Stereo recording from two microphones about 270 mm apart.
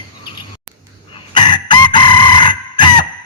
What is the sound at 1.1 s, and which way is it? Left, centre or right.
Chicken, centre.